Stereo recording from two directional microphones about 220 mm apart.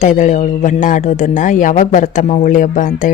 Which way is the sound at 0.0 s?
35° left (ahead or behind).